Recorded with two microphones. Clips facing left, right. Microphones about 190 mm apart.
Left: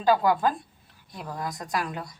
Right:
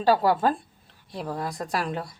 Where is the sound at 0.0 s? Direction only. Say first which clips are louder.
Right 1 dB; 30° right (ahead or behind).